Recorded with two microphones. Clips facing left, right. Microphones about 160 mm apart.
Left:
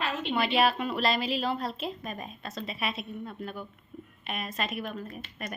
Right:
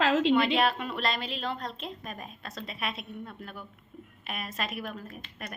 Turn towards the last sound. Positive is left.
turn(degrees=0)  # may be behind; listen again after turning